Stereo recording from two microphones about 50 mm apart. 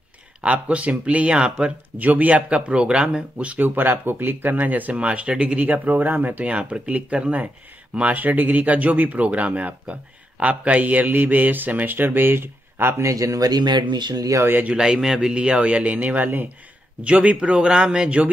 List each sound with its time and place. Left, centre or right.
0.4 s speech: right
2.0 s speech: right
3.5 s speech: right
5.6 s speech: right
6.4 s speech: right
14.8 s speech: centre